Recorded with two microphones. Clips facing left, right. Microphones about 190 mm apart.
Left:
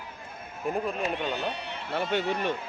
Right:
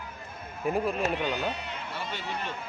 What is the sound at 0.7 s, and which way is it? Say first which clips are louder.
Speech: right 2 dB; centre (ahead or behind).